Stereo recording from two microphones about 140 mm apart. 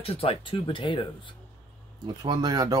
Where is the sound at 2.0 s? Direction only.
30° right (ahead or behind).